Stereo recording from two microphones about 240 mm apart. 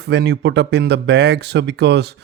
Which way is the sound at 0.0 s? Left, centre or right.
Right.